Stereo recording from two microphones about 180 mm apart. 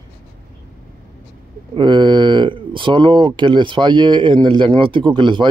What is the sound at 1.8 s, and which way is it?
Speech, 25° right (ahead or behind).